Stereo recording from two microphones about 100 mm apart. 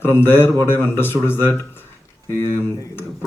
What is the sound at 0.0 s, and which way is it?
Speech, 25° left (ahead or behind).